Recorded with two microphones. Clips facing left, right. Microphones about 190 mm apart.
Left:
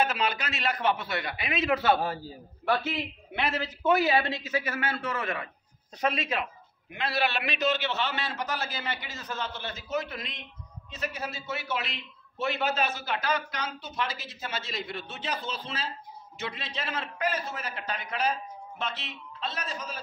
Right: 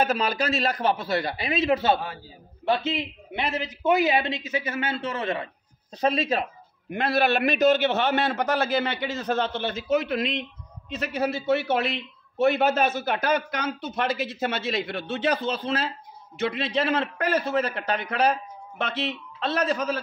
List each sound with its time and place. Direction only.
0.0 s a man's voice: 40° right (ahead or behind)
6.9 s a man's voice: 50° right (ahead or behind); by 20.0 s 70° right (ahead or behind)